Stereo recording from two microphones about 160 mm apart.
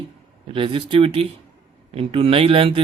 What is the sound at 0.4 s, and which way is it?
A man's voice, 35° right (ahead or behind).